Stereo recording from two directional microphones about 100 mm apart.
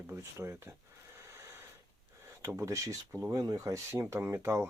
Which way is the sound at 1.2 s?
25° right (ahead or behind).